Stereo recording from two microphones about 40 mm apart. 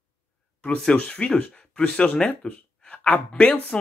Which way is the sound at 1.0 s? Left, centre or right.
Left.